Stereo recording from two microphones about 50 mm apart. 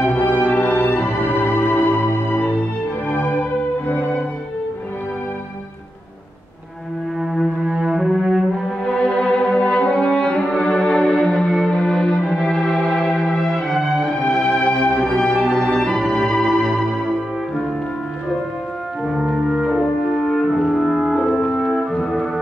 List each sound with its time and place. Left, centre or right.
0.1 s music: left
7.6 s music: centre
8.8 s music: left
9.8 s french horn: centre
10.6 s music: centre
12.1 s music: centre
14.5 s music: centre
15.5 s music: centre
15.8 s music: centre
19.4 s music: centre
20.2 s french horn: centre
20.6 s music: centre
21.4 s organ: centre